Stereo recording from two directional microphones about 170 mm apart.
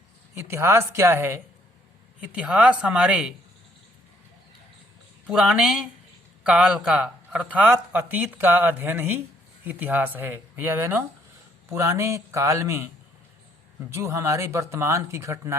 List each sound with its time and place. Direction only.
0.3 s a man's voice: 15° right (ahead or behind)
5.3 s a man's voice: 5° right (ahead or behind)
13.9 s a man's voice: 15° right (ahead or behind)